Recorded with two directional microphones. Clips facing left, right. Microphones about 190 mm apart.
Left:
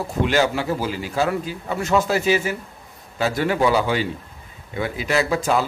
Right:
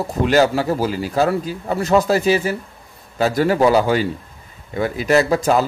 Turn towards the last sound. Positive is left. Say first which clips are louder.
# right 4 dB
turn(degrees=-40)  # may be behind; listen again after turning